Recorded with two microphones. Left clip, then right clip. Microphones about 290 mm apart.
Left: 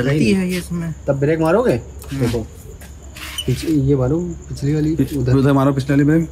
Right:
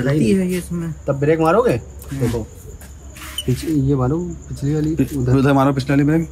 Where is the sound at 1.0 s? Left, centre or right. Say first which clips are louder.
Right 1 dB; right.